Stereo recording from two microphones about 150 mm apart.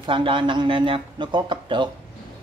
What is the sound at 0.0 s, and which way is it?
Speech, 35° right (ahead or behind).